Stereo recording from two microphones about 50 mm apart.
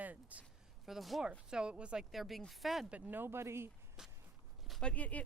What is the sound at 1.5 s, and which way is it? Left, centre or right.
Speech, right.